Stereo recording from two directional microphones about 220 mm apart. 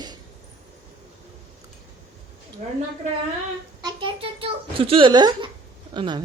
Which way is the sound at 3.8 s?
25° right (ahead or behind).